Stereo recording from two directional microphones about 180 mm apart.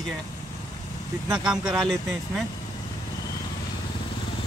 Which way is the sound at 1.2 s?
5° right (ahead or behind).